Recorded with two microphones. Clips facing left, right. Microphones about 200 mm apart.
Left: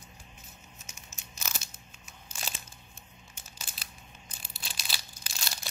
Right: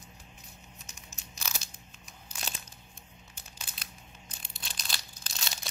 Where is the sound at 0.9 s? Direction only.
35° right (ahead or behind).